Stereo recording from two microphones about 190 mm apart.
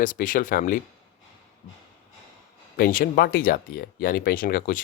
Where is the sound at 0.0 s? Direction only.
45° left (ahead or behind).